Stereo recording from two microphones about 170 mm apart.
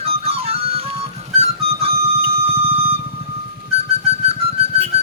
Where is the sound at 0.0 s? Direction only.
35° right (ahead or behind).